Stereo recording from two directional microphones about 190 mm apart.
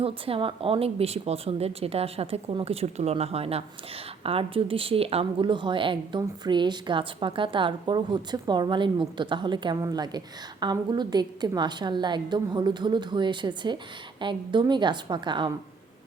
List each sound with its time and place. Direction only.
0.0 s a woman's voice: 30° right (ahead or behind)